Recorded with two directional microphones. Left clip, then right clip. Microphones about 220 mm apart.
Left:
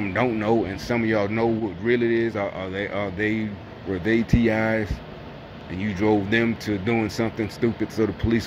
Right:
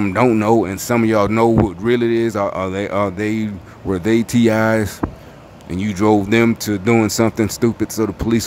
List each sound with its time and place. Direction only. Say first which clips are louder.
0.4 s speech: right 7 dB; 25° right (ahead or behind)